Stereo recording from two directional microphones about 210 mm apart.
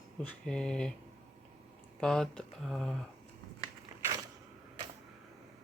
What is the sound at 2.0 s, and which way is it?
Speech, 5° left (ahead or behind).